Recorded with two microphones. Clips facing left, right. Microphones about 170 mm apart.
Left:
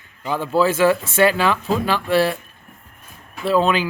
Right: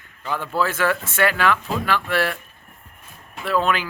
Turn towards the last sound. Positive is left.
turn(degrees=30)  # may be behind; listen again after turning